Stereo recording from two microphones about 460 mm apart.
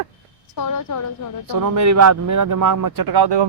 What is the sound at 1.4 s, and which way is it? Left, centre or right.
Speech, right.